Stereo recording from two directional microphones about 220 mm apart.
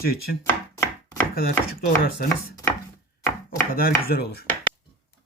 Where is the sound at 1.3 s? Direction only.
45° left (ahead or behind).